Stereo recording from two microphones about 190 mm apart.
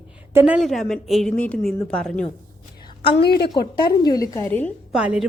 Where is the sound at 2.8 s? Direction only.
25° left (ahead or behind).